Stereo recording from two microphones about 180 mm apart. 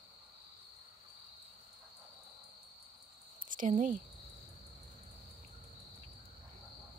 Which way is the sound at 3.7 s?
45° right (ahead or behind).